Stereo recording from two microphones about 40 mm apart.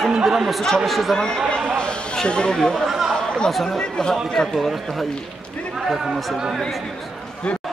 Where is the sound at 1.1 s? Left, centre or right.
Centre.